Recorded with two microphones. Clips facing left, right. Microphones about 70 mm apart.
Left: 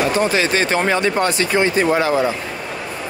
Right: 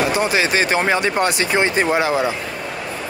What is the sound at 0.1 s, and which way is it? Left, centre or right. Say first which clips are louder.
Speech: left 1 dB; centre.